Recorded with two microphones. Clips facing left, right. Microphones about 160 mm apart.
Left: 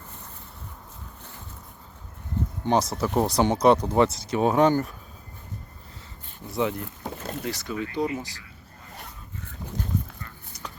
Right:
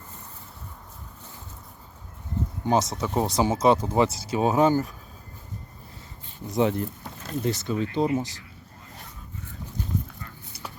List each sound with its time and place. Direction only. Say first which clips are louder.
2.6 s speech: even; centre (ahead or behind)
4.3 s speech: left 1 dB; 25° right (ahead or behind)
4.5 s speech: even; 5° right (ahead or behind)
6.6 s speech: right 3 dB; 35° right (ahead or behind)